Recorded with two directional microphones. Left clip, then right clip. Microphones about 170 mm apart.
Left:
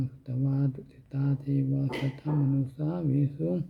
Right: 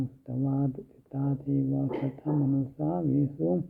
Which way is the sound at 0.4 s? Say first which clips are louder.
Right 2 dB; 20° left (ahead or behind).